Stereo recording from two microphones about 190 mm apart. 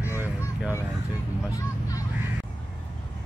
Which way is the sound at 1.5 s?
15° left (ahead or behind).